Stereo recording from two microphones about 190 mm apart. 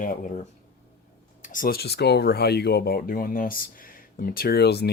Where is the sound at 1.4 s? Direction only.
45° left (ahead or behind).